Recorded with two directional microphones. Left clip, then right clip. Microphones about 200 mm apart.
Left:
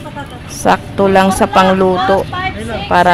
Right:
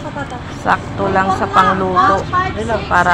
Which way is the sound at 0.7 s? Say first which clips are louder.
Left 5 dB; 55° left (ahead or behind).